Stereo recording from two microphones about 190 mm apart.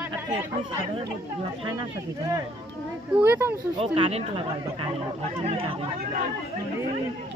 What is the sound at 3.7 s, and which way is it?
Speech, 30° right (ahead or behind).